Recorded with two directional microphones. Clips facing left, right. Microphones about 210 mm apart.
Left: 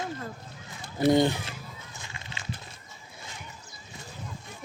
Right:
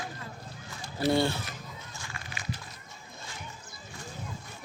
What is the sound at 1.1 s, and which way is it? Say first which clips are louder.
Speech: left 4 dB; 20° left (ahead or behind).